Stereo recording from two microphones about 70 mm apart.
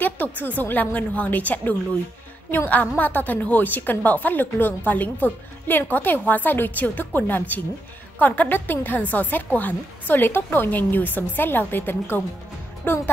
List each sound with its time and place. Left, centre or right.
0.0 s a woman's voice: left